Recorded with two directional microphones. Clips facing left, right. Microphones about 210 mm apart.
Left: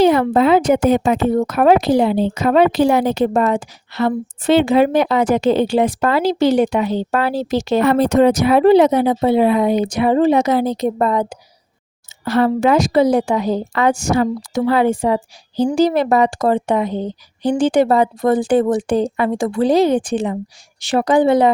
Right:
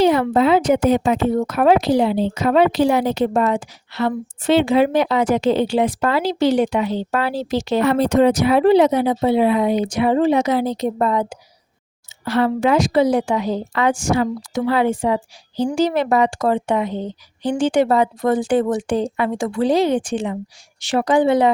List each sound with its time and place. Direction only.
0.0 s a woman's voice: 50° left (ahead or behind)